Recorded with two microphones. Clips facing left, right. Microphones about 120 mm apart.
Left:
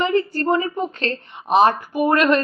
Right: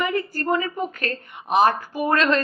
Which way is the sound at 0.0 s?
30° left (ahead or behind).